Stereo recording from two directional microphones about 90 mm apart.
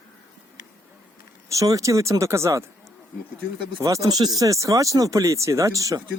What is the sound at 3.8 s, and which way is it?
Speech, 40° right (ahead or behind).